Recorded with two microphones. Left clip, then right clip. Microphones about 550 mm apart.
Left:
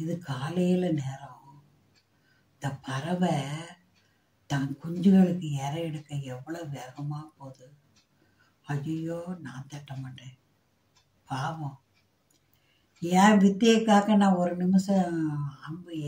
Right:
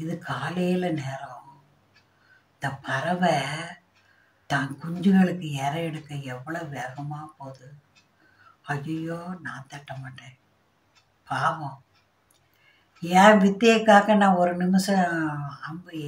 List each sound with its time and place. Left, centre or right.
0.0 s speech: left
2.6 s speech: left
8.6 s speech: left
11.2 s speech: left
13.0 s speech: left